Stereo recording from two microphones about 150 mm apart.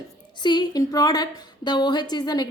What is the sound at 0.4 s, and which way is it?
A woman's voice, 25° left (ahead or behind).